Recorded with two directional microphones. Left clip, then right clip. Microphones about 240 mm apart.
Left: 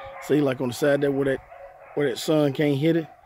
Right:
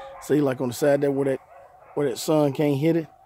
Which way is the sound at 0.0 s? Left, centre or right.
Centre.